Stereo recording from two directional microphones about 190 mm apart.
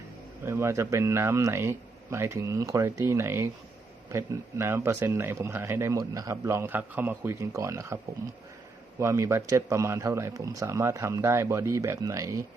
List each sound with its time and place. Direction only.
0.4 s speech: 15° right (ahead or behind)
9.0 s speech: 15° right (ahead or behind)